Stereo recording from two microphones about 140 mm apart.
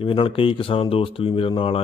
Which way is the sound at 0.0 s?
40° left (ahead or behind).